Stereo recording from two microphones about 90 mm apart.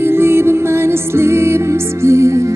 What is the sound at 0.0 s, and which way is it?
Music, 25° right (ahead or behind).